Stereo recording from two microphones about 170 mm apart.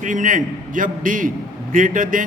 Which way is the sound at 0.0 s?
50° right (ahead or behind).